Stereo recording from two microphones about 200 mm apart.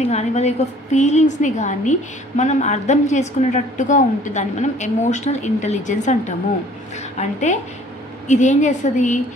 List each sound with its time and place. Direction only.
0.0 s a woman's voice: 35° left (ahead or behind)